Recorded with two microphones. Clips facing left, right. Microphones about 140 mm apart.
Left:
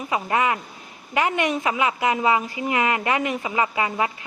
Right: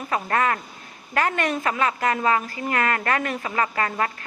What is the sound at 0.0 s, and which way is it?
A woman's voice, 15° left (ahead or behind).